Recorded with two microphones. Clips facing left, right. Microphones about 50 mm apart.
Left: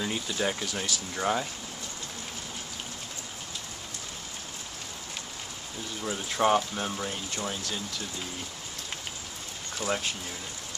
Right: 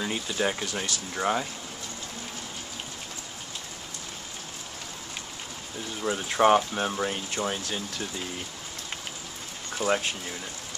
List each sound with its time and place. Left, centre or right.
0.0 s speech: centre
6.0 s speech: right
9.8 s speech: centre